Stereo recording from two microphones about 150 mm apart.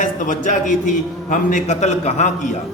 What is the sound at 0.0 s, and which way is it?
A man's voice, 55° left (ahead or behind).